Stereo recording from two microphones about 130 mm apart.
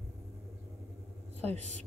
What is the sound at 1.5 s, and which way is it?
Speech, 65° right (ahead or behind).